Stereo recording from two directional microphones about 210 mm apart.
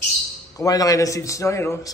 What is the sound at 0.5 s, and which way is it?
Mantra, 15° left (ahead or behind).